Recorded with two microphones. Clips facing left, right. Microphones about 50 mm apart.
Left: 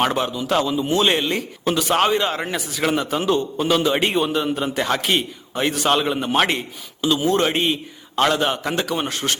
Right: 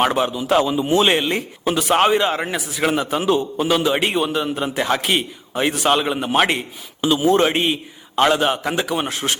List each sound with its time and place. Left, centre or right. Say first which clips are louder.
0.0 s a man's voice: right 2 dB; centre